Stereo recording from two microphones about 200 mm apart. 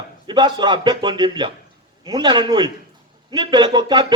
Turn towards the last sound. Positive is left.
turn(degrees=-20)  # may be behind; listen again after turning